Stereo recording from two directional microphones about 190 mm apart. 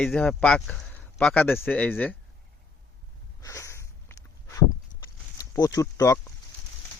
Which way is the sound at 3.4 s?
15° left (ahead or behind).